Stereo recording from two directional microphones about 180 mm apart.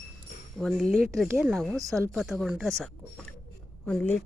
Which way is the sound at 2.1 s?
Centre (ahead or behind).